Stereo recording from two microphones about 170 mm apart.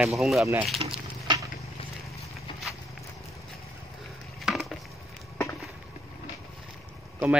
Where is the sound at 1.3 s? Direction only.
25° right (ahead or behind).